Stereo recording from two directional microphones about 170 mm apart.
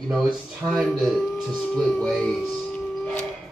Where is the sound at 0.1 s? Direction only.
5° right (ahead or behind).